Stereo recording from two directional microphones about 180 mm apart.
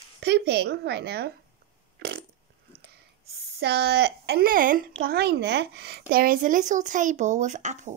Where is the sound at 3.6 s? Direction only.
65° right (ahead or behind).